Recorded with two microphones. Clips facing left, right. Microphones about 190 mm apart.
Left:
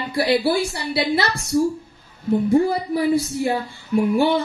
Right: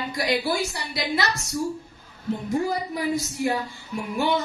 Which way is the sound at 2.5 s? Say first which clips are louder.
Left 6 dB; 30° left (ahead or behind).